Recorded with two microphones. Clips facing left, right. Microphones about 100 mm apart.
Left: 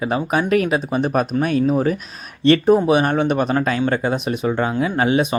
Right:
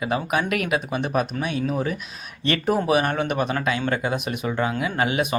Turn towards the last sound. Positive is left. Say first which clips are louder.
# left 5 dB
turn(degrees=30)  # may be behind; listen again after turning